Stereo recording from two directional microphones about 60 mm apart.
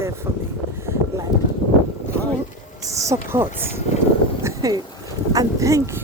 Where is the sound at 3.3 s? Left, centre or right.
Right.